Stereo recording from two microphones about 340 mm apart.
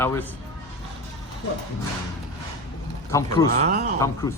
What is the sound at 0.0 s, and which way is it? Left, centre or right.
Speech, centre.